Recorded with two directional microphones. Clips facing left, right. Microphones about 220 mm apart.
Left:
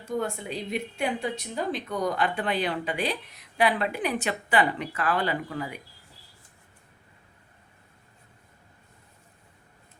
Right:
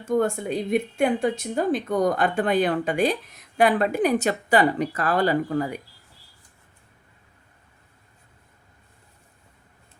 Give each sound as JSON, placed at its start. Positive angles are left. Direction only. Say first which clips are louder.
{"t": 0.0, "sound": "speech", "louder": "right 7 dB", "side_deg": -50}